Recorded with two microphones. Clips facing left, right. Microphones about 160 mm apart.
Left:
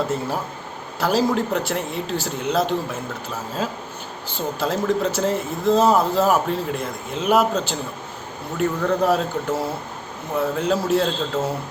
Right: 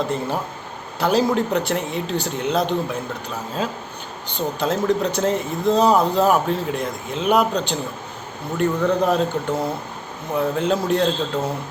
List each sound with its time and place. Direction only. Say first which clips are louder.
0.9 s speech: right 1 dB; centre (ahead or behind)
4.3 s speech: right 2 dB; 5° left (ahead or behind)